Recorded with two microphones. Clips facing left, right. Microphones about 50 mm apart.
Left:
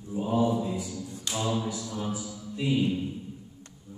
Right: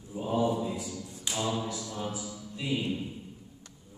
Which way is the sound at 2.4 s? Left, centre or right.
Centre.